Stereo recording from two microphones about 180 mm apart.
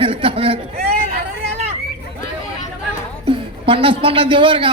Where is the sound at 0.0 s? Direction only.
30° right (ahead or behind).